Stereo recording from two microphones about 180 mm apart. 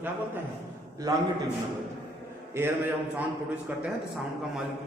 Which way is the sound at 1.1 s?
20° right (ahead or behind).